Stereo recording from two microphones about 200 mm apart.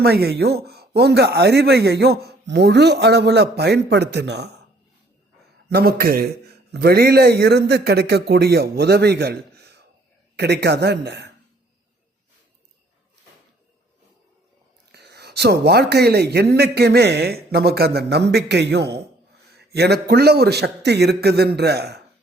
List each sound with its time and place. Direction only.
0.0 s speech: 50° right (ahead or behind)
5.7 s a man's voice: 50° right (ahead or behind)
14.9 s a man's voice: 55° right (ahead or behind)